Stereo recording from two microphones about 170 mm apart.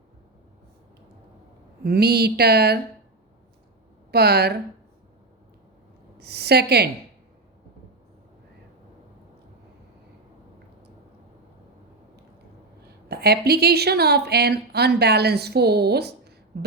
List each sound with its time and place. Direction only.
1.8 s a woman's voice: 70° right (ahead or behind)
4.1 s a woman's voice: 70° right (ahead or behind)
6.1 s a woman's voice: 70° right (ahead or behind)
12.8 s a woman's voice: 70° right (ahead or behind)
16.5 s a sound: 75° right (ahead or behind)